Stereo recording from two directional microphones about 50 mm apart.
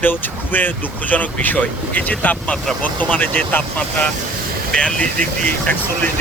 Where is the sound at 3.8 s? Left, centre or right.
Left.